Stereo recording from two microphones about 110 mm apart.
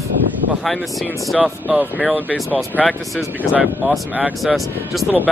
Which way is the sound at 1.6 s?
10° right (ahead or behind).